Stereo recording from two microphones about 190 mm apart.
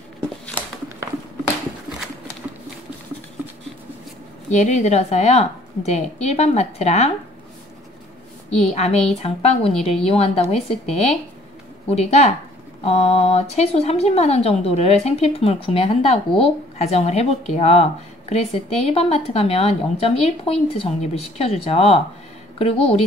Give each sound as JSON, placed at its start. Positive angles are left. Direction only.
{"t": 4.5, "sound": "speech", "side_deg": 40}
{"t": 8.6, "sound": "speech", "side_deg": 35}